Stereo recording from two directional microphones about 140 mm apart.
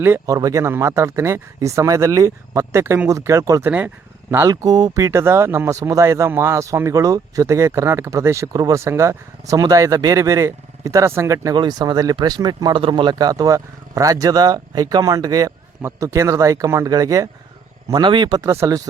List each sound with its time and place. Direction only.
0.0 s speech: 20° right (ahead or behind)
3.7 s speech: 10° right (ahead or behind)